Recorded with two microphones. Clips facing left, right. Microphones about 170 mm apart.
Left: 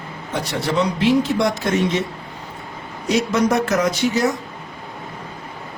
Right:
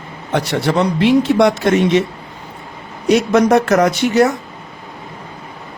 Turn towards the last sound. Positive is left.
turn(degrees=-65)  # may be behind; listen again after turning